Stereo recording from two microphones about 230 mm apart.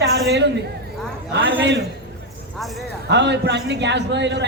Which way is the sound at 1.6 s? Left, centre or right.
Right.